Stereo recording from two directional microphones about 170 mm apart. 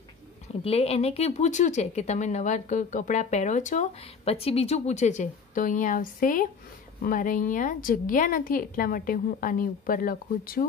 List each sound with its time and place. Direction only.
0.5 s a woman's voice: 35° left (ahead or behind); by 10.7 s 55° left (ahead or behind)